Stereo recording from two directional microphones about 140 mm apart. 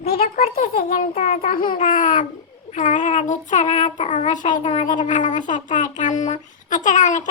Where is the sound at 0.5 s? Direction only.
90° left.